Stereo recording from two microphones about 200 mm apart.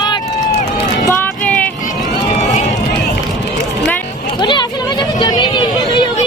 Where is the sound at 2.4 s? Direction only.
35° left (ahead or behind).